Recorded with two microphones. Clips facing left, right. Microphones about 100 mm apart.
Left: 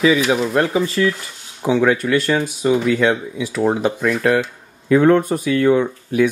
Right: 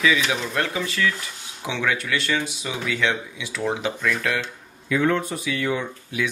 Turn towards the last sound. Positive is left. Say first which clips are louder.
# left 11 dB
turn(degrees=45)  # may be behind; listen again after turning